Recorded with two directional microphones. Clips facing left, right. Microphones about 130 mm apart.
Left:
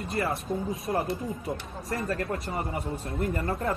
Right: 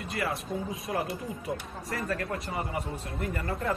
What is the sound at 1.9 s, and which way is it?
A man's voice, 25° left (ahead or behind).